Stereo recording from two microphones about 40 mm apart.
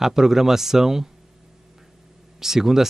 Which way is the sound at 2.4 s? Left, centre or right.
Centre.